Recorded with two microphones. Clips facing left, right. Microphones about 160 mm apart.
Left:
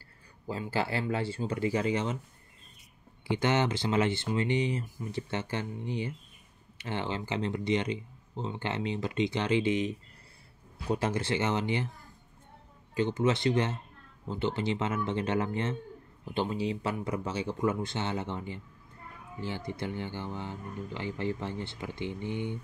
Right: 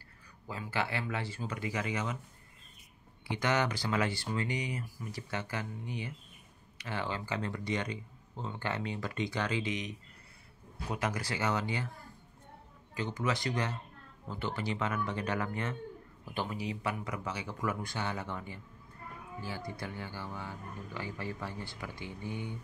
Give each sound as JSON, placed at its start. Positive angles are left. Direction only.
{"t": 0.5, "sound": "speech", "side_deg": 30}
{"t": 3.3, "sound": "speech", "side_deg": 25}
{"t": 12.9, "sound": "speech", "side_deg": 25}